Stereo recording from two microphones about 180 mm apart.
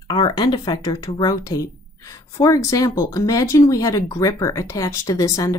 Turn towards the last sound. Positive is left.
turn(degrees=15)  # may be behind; listen again after turning